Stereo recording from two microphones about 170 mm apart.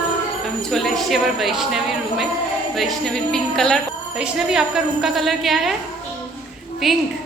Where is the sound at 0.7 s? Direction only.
Centre (ahead or behind).